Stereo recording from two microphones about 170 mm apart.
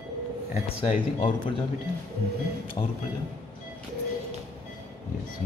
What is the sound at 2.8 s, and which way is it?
Speech, 30° left (ahead or behind).